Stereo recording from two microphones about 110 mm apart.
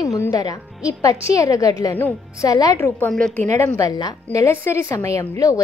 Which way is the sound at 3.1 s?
10° left (ahead or behind).